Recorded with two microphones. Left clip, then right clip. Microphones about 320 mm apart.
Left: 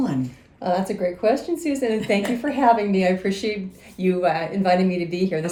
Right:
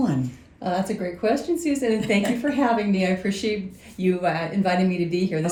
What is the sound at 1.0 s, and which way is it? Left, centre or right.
Speech, centre.